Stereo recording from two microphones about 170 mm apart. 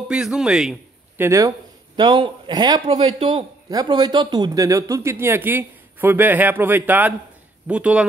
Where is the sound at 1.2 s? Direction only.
20° right (ahead or behind).